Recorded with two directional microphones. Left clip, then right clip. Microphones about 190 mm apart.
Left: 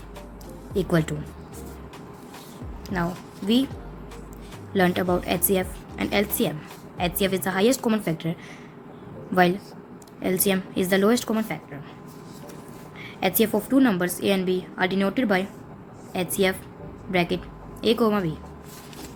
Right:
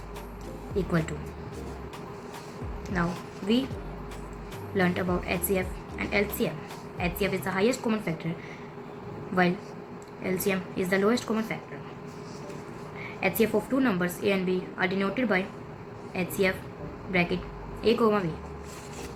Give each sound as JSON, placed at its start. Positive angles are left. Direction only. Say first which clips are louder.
{"t": 0.9, "sound": "a woman's voice", "louder": "left 8 dB", "side_deg": 60}
{"t": 2.9, "sound": "speech", "louder": "left 2 dB", "side_deg": 60}
{"t": 4.8, "sound": "a woman's voice", "louder": "left 5 dB", "side_deg": 60}
{"t": 10.2, "sound": "a woman's voice", "louder": "left 5 dB", "side_deg": 60}
{"t": 13.1, "sound": "a woman's voice", "louder": "left 3 dB", "side_deg": 65}